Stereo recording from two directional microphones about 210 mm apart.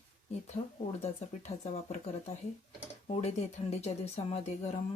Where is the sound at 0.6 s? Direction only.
30° left (ahead or behind).